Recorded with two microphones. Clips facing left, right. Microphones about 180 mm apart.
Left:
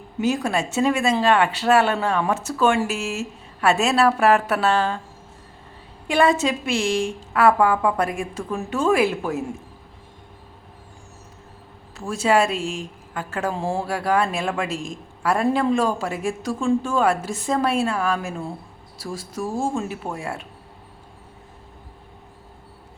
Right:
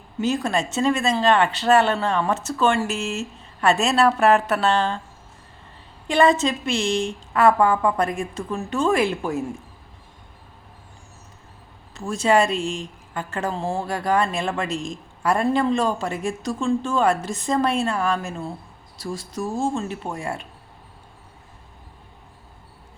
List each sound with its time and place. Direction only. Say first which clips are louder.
0.2 s a woman's voice: left 1 dB; 10° left (ahead or behind)
6.1 s a woman's voice: right 1 dB; 10° left (ahead or behind)
11.9 s a woman's voice: even; 5° left (ahead or behind)